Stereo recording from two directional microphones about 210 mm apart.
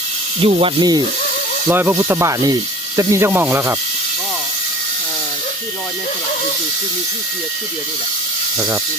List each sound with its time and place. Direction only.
0.4 s speech: 25° right (ahead or behind)